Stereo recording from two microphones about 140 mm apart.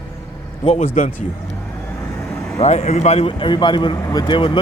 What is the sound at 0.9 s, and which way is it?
Speech, 75° left (ahead or behind).